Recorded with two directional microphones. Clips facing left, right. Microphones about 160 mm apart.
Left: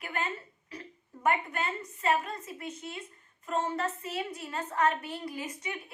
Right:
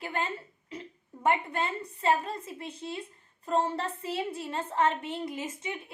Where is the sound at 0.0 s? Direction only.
30° right (ahead or behind).